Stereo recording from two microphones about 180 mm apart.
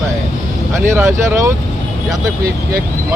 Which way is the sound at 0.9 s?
15° right (ahead or behind).